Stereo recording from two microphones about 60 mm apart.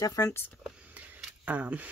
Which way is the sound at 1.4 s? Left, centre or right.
Right.